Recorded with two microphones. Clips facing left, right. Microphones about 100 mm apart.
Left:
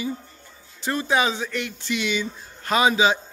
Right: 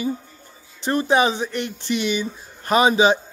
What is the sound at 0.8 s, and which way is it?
Speech, 25° right (ahead or behind).